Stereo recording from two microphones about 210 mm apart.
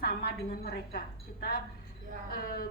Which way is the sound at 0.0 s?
50° left (ahead or behind).